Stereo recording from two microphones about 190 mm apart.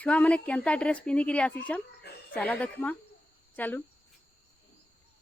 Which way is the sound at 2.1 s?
60° left (ahead or behind).